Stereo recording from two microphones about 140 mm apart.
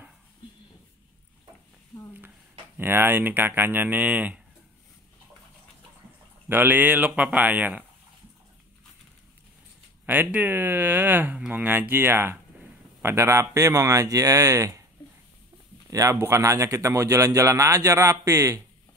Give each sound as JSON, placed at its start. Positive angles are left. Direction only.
{"t": 2.8, "sound": "speech", "side_deg": -15}
{"t": 6.5, "sound": "speech", "side_deg": -15}
{"t": 10.0, "sound": "speech", "side_deg": -10}
{"t": 15.9, "sound": "speech", "side_deg": -20}